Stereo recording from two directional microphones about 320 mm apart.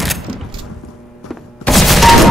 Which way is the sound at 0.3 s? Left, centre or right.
Centre.